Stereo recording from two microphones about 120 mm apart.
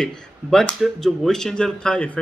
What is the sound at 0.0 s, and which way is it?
A man's voice, 5° left (ahead or behind).